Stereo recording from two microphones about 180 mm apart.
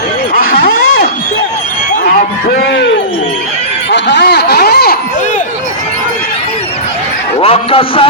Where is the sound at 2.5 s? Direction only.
70° left (ahead or behind).